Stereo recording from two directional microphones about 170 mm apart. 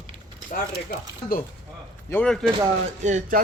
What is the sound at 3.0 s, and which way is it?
Speech, 45° right (ahead or behind).